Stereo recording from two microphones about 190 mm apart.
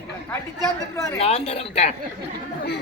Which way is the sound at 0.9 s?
15° left (ahead or behind).